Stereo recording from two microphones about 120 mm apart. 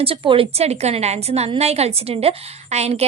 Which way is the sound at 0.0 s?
50° right (ahead or behind).